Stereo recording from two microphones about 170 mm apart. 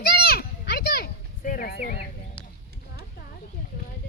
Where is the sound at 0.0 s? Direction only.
65° left (ahead or behind).